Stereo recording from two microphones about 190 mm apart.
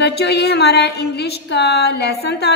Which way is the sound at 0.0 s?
60° left (ahead or behind).